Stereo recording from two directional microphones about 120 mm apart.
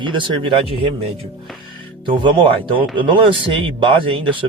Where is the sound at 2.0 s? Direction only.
45° right (ahead or behind).